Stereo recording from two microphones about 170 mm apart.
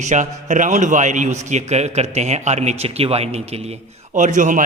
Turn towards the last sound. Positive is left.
turn(degrees=-50)  # may be behind; listen again after turning